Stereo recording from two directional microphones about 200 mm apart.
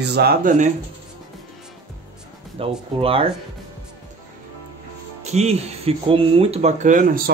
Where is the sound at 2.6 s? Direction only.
30° right (ahead or behind).